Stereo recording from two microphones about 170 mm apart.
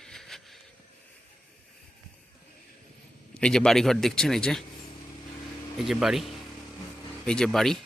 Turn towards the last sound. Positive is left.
turn(degrees=0)  # may be behind; listen again after turning